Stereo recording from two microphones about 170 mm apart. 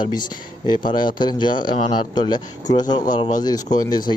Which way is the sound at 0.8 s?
50° left (ahead or behind).